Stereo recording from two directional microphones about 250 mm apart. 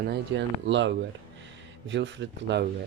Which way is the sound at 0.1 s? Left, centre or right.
Right.